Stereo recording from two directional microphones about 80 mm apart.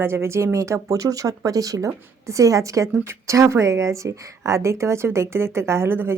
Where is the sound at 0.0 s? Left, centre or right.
Right.